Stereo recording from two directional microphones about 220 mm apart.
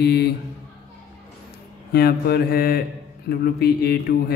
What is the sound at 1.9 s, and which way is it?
A man's voice, 45° left (ahead or behind).